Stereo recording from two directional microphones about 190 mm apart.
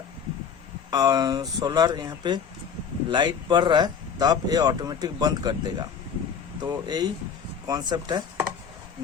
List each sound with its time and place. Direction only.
0.9 s speech: 20° right (ahead or behind)